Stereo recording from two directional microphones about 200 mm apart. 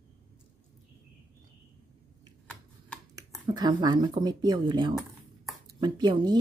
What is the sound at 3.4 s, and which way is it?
Speech, 20° right (ahead or behind).